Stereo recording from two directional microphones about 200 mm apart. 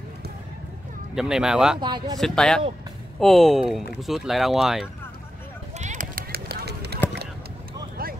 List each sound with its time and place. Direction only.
1.1 s speech: 5° right (ahead or behind)
1.8 s speech: 20° right (ahead or behind)
2.1 s speech: 5° left (ahead or behind)
5.8 s run: 40° right (ahead or behind); by 7.0 s 55° right (ahead or behind)
8.0 s a sound: 45° right (ahead or behind)